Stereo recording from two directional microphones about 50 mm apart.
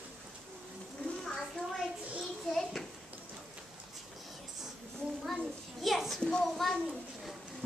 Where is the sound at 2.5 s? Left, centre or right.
Centre.